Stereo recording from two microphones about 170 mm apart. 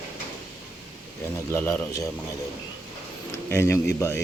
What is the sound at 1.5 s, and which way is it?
Speech, 10° left (ahead or behind).